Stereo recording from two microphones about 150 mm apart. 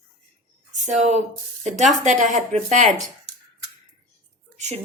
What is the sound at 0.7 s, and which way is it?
Speech, 55° right (ahead or behind).